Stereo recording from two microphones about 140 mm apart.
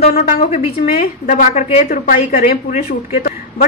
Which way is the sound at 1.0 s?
65° left (ahead or behind).